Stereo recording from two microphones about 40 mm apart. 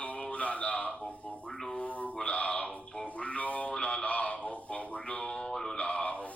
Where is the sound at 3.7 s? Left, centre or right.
Left.